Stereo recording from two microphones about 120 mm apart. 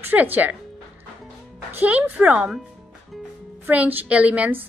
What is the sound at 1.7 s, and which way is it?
Speech, 15° right (ahead or behind).